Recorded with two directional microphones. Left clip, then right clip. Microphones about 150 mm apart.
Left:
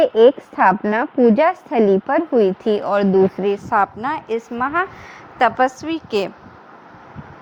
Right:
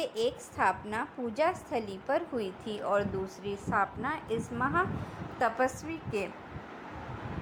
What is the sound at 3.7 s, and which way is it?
Speech, 70° left (ahead or behind).